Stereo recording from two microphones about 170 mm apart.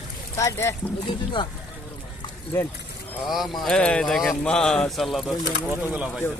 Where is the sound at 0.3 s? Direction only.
15° left (ahead or behind).